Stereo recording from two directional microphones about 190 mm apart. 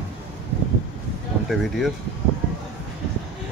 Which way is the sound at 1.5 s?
Centre (ahead or behind).